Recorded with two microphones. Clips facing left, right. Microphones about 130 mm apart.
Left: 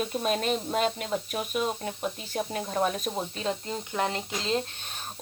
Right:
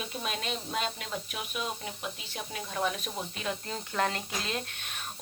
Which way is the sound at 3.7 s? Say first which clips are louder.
Left 2 dB; 20° left (ahead or behind).